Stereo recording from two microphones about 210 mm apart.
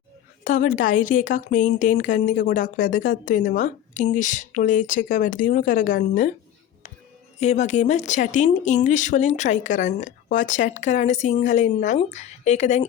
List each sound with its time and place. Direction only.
0.4 s speech: 35° left (ahead or behind)
7.3 s speech: 35° left (ahead or behind)